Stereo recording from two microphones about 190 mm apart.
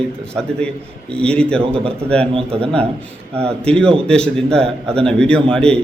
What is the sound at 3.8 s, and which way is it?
A man's voice, 5° left (ahead or behind).